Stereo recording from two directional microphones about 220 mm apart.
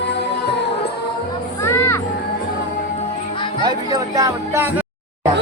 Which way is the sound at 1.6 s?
10° left (ahead or behind).